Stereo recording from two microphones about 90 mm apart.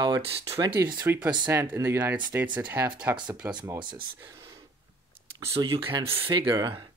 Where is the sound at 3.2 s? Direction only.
50° right (ahead or behind).